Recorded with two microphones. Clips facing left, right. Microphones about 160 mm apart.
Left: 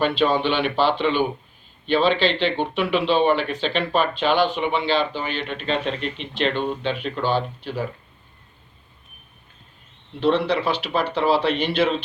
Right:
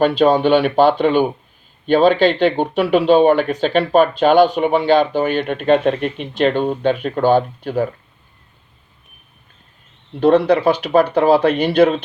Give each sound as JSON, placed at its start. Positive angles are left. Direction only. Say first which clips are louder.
{"t": 0.0, "sound": "speech", "louder": "right 7 dB", "side_deg": -45}
{"t": 10.2, "sound": "speech", "louder": "right 7 dB", "side_deg": -45}